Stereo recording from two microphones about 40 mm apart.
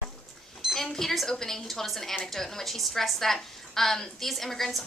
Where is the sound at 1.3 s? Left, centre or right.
Centre.